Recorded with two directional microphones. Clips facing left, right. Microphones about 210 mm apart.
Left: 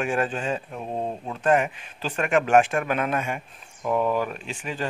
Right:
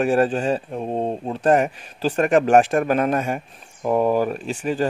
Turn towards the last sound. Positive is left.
turn(degrees=-40)  # may be behind; listen again after turning